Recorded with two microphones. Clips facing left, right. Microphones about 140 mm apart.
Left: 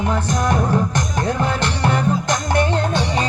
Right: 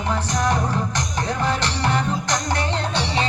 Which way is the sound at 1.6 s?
55° left (ahead or behind).